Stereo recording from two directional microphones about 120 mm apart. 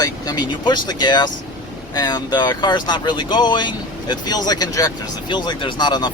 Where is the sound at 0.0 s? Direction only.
35° left (ahead or behind).